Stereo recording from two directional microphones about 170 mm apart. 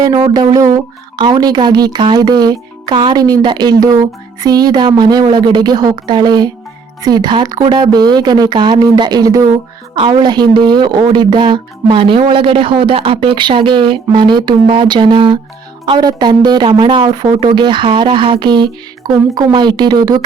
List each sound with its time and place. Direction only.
0.0 s a woman's voice: 25° right (ahead or behind)